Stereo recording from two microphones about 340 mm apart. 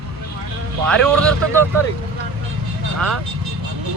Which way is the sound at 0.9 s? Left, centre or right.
Centre.